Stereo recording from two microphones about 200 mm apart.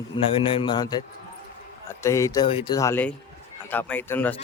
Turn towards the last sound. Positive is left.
turn(degrees=10)  # may be behind; listen again after turning